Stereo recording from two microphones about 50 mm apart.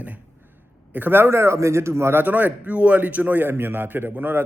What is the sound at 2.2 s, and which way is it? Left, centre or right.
A man's voice, right.